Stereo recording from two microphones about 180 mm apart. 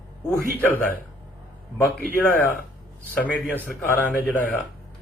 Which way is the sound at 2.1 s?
10° left (ahead or behind).